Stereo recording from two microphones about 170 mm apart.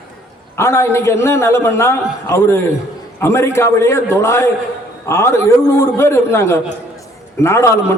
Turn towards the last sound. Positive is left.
turn(degrees=15)  # may be behind; listen again after turning